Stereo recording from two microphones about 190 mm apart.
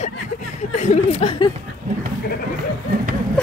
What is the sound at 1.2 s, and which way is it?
Speech, 35° left (ahead or behind).